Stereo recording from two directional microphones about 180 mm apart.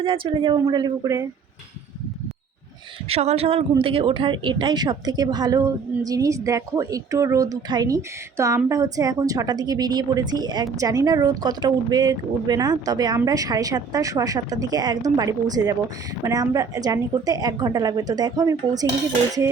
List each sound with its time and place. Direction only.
0.0 s speech: 30° right (ahead or behind)
3.1 s speech: 35° right (ahead or behind)